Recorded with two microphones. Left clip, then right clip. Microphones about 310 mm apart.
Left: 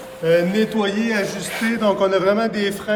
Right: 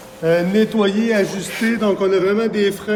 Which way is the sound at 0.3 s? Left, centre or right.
Centre.